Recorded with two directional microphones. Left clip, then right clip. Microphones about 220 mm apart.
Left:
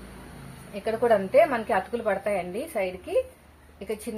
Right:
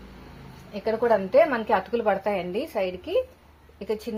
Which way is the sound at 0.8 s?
20° right (ahead or behind).